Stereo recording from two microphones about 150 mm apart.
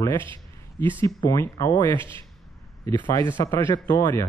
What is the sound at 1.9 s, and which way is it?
Speech, 35° right (ahead or behind).